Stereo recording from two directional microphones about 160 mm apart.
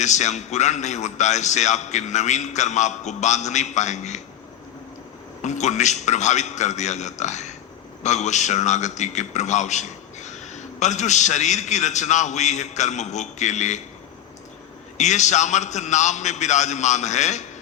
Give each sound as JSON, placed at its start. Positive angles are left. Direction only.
{"t": 0.0, "sound": "a man's voice", "side_deg": 45}
{"t": 5.4, "sound": "a man's voice", "side_deg": 45}
{"t": 14.9, "sound": "a man's voice", "side_deg": 45}